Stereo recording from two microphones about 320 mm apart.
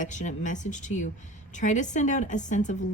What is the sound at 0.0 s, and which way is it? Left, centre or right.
A woman's voice, left.